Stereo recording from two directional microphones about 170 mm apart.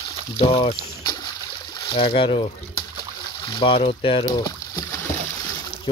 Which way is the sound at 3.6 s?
35° left (ahead or behind).